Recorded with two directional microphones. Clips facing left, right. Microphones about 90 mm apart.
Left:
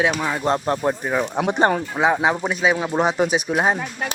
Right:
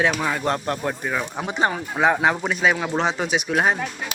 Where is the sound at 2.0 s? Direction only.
15° left (ahead or behind).